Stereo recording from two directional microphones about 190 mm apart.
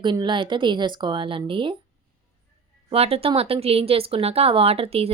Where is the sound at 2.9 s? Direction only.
30° right (ahead or behind).